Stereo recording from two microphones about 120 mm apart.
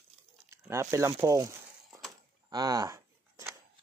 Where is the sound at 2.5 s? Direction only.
30° right (ahead or behind).